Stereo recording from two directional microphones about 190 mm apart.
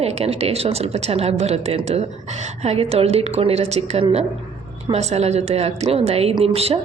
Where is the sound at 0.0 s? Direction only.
35° right (ahead or behind).